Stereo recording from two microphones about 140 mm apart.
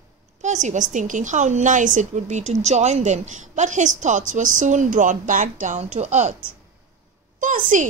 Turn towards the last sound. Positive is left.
turn(degrees=-65)  # may be behind; listen again after turning